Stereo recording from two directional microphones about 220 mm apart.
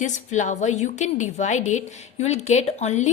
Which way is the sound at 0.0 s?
35° left (ahead or behind).